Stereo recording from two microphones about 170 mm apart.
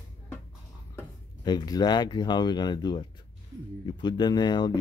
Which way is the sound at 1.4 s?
25° left (ahead or behind).